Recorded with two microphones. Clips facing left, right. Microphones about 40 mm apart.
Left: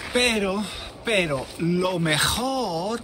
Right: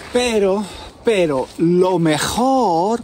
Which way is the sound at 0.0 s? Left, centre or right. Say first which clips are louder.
Right 6 dB; centre.